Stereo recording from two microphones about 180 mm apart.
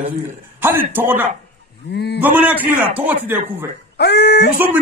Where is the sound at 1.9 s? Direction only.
65° left (ahead or behind).